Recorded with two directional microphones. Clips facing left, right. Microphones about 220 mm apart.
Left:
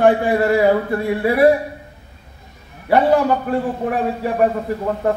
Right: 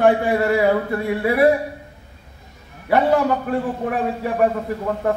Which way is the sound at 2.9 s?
35° left (ahead or behind).